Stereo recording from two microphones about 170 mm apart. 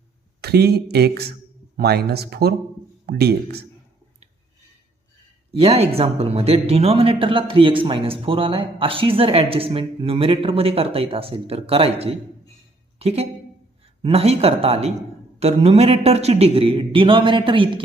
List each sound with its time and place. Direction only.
0.4 s speech: 70° right (ahead or behind)
5.5 s a man's voice: 35° right (ahead or behind)